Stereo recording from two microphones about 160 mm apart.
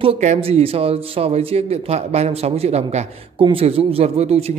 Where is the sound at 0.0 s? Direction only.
45° right (ahead or behind).